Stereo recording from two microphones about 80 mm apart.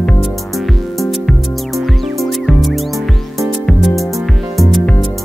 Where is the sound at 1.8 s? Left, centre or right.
Centre.